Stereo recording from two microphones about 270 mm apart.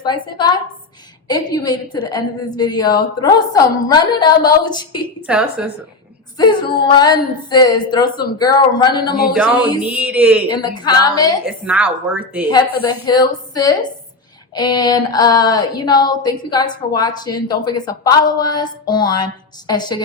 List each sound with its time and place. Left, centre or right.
0.0 s a woman's voice: centre
5.2 s a woman's voice: centre
6.3 s a woman's voice: centre
9.2 s a woman's voice: centre
10.5 s a woman's voice: centre
11.4 s a woman's voice: centre
12.9 s a woman's voice: centre